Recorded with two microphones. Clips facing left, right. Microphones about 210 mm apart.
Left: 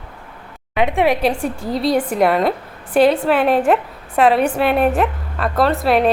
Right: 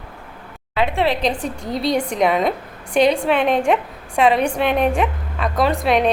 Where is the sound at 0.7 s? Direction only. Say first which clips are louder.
Left 3 dB; 15° left (ahead or behind).